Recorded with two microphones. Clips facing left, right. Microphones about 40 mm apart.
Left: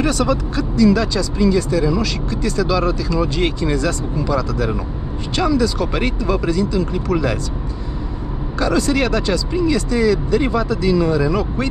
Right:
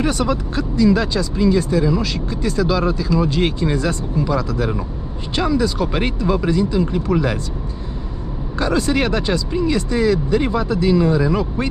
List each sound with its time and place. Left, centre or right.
0.6 s speech: right
6.9 s speech: centre
8.5 s speech: right